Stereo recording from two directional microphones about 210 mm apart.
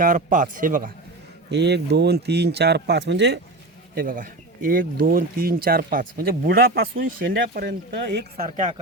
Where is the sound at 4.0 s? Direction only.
40° right (ahead or behind).